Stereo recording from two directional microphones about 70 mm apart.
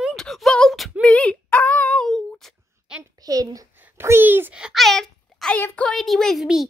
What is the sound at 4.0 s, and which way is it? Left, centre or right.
Speech, right.